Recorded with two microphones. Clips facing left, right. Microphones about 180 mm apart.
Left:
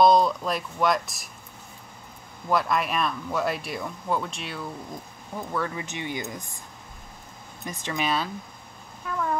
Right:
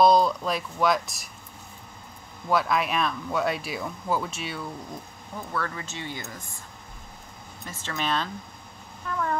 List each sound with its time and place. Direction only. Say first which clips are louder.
0.0 s speech: even; centre (ahead or behind)
2.4 s speech: even; centre (ahead or behind)
5.5 s speech: left 2 dB; 15° left (ahead or behind)
7.6 s speech: left 3 dB; 15° left (ahead or behind)